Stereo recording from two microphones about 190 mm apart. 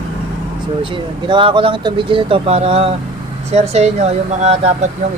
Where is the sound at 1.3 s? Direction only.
25° right (ahead or behind).